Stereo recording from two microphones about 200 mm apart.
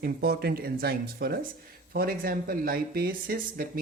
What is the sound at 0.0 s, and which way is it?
Speech, 50° right (ahead or behind).